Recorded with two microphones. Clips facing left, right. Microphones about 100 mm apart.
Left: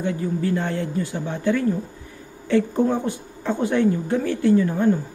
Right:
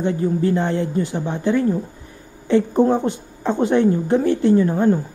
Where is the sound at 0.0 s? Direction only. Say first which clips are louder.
Right 5 dB; 30° right (ahead or behind).